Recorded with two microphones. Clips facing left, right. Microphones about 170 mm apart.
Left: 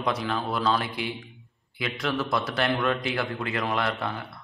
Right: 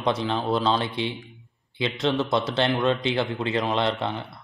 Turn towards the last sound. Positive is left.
turn(degrees=-25)  # may be behind; listen again after turning